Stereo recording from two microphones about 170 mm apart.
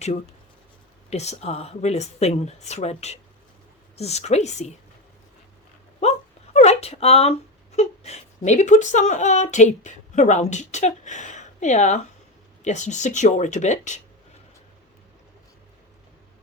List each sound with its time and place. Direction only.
1.1 s speech: 40° left (ahead or behind)
6.0 s a sound: 40° left (ahead or behind)
7.8 s whimper: 40° left (ahead or behind)
8.4 s speech: 45° left (ahead or behind)